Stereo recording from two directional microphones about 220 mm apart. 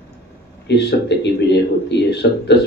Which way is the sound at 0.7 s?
50° left (ahead or behind).